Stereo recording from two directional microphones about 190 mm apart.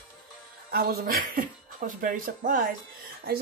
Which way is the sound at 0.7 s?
50° right (ahead or behind).